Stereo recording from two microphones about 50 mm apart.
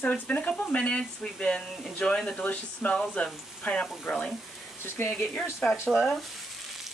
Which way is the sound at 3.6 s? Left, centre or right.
Centre.